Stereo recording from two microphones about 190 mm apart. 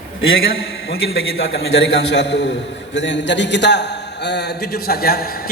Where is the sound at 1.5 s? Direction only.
90° left.